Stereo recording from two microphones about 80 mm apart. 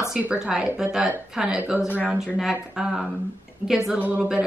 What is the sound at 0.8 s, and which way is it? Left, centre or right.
Speech, centre.